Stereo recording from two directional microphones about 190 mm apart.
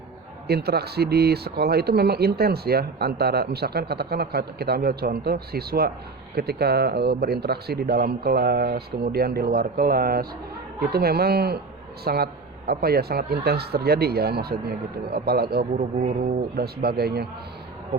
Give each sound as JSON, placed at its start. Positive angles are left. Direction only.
{"t": 0.4, "sound": "speech", "side_deg": -55}